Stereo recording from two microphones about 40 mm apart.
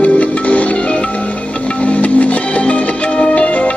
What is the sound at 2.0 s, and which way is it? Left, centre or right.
Music, left.